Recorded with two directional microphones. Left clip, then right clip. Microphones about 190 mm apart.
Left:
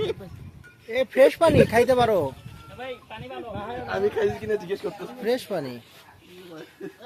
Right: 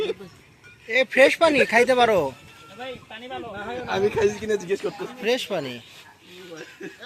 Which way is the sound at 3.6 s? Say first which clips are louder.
Right 2 dB; 45° right (ahead or behind).